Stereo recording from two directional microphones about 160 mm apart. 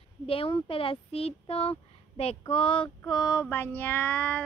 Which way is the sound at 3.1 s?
20° left (ahead or behind).